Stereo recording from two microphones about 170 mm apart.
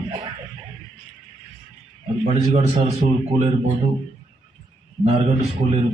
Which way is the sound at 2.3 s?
35° right (ahead or behind).